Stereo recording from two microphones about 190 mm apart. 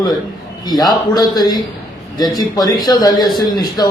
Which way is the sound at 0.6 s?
20° left (ahead or behind).